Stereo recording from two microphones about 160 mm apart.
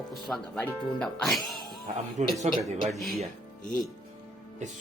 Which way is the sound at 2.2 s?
50° right (ahead or behind).